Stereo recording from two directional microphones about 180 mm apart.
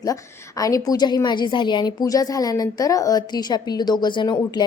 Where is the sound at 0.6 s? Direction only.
20° left (ahead or behind).